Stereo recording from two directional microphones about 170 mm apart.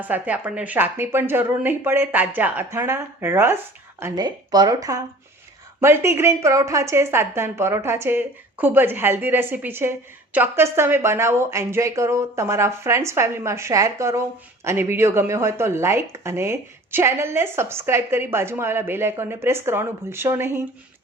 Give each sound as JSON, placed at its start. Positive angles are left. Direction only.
{"t": 0.0, "sound": "speech", "side_deg": -10}